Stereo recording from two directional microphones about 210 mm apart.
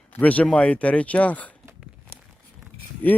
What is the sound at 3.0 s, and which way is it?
Speech, 10° left (ahead or behind).